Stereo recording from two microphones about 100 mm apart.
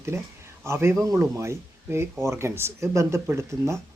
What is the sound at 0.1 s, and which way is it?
Speech, 25° right (ahead or behind).